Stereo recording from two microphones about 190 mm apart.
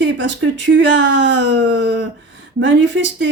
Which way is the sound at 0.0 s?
75° right (ahead or behind).